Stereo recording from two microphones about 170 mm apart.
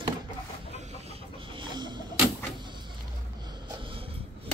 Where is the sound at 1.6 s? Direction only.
25° right (ahead or behind).